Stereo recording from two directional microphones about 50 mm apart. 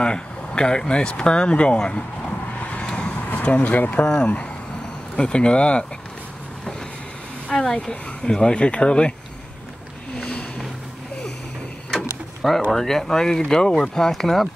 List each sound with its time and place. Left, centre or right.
0.0 s speech: centre
2.6 s vehicle: left
3.4 s speech: left
3.7 s speech: left
5.1 s speech: left
7.5 s speech: centre
11.9 s mechanisms: centre
12.7 s speech: centre